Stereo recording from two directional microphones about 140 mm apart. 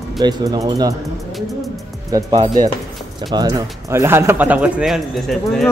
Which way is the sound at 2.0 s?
25° right (ahead or behind).